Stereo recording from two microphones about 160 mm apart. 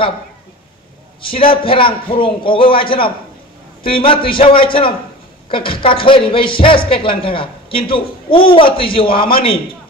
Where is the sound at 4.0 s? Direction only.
30° left (ahead or behind).